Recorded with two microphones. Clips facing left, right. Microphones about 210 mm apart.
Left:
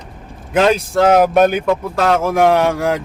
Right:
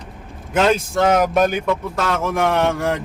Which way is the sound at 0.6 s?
35° left (ahead or behind).